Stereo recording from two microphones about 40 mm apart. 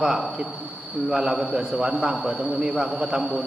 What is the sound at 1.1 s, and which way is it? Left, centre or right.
A man's voice, centre.